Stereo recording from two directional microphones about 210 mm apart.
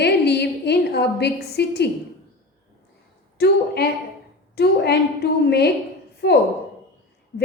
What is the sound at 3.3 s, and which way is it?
A woman's voice, 50° left (ahead or behind).